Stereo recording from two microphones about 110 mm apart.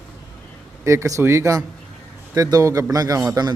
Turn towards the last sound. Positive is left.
turn(degrees=-35)  # may be behind; listen again after turning